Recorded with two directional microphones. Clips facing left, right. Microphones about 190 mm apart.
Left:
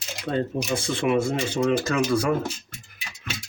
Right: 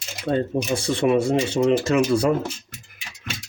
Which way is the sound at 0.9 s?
40° right (ahead or behind).